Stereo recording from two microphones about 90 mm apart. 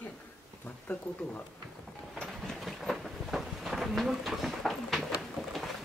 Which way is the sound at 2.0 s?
5° left (ahead or behind).